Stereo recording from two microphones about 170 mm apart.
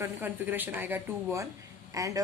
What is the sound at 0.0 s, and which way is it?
Speech, 10° right (ahead or behind).